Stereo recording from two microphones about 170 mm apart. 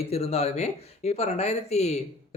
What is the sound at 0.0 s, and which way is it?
Speech, 35° left (ahead or behind).